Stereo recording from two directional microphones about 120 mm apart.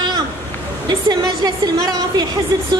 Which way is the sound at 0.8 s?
35° right (ahead or behind).